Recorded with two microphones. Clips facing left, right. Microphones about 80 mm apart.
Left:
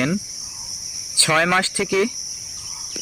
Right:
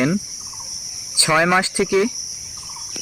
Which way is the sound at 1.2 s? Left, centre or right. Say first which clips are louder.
Right 2 dB; centre.